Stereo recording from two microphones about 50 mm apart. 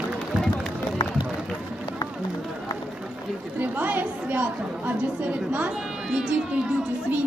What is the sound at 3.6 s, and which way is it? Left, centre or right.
A woman's voice, right.